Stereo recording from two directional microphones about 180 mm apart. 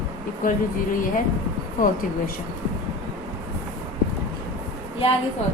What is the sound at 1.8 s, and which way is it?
Speech, 50° left (ahead or behind).